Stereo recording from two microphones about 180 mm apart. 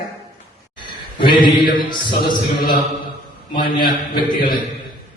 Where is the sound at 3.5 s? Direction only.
25° left (ahead or behind).